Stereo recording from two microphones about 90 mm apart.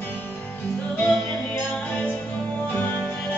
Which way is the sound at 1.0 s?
30° left (ahead or behind).